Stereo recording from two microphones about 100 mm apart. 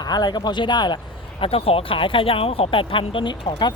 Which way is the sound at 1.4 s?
75° left (ahead or behind).